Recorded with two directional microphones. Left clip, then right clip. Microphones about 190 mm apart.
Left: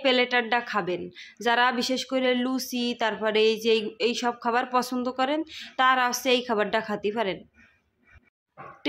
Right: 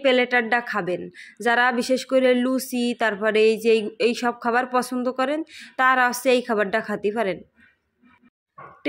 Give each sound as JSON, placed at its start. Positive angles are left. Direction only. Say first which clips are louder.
{"t": 0.0, "sound": "a woman's voice", "louder": "right 4 dB", "side_deg": -15}